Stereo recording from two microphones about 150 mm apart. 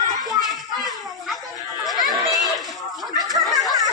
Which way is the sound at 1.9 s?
Centre (ahead or behind).